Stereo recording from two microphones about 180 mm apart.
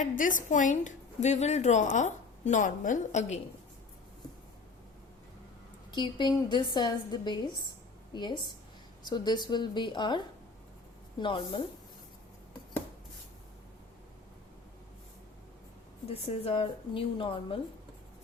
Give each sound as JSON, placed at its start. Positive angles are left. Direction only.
{"t": 0.0, "sound": "a woman's voice", "side_deg": 45}
{"t": 5.9, "sound": "a woman's voice", "side_deg": 25}
{"t": 16.0, "sound": "speech", "side_deg": 35}